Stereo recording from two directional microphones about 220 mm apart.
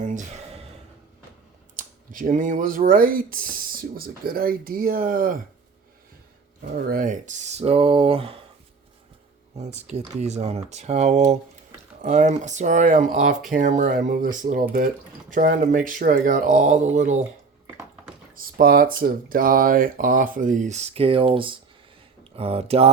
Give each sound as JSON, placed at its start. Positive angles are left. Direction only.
{"t": 0.0, "sound": "gasp", "side_deg": -35}
{"t": 1.7, "sound": "speech", "side_deg": -35}
{"t": 6.7, "sound": "speech", "side_deg": -40}
{"t": 9.9, "sound": "speech", "side_deg": -30}
{"t": 18.3, "sound": "speech", "side_deg": -40}